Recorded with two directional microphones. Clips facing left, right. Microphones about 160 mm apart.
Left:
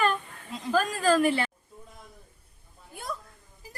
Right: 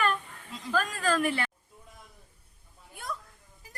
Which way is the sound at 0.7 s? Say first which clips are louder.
Left 5 dB; 30° left (ahead or behind).